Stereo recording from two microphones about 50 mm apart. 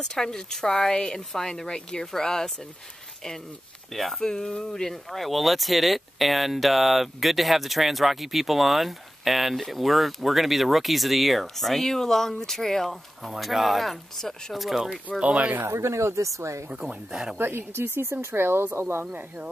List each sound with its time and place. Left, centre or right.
0.0 s speech: centre
3.9 s speech: centre
15.1 s speech: right
15.6 s speech: right
16.7 s speech: centre
17.4 s speech: right